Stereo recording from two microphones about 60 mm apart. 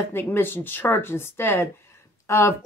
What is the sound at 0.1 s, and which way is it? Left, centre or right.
Speech, left.